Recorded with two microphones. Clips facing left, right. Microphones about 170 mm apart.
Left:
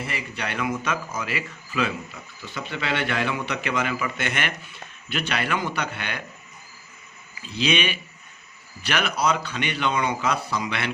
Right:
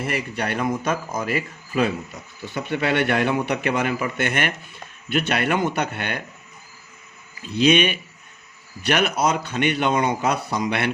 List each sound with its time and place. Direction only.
0.0 s a man's voice: 55° right (ahead or behind)
7.4 s a man's voice: 55° right (ahead or behind)